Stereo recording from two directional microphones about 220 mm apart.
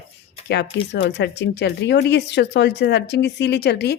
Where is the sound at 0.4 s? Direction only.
50° left (ahead or behind).